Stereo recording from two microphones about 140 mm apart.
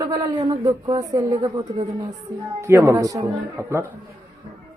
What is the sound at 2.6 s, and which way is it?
Speech, 15° right (ahead or behind).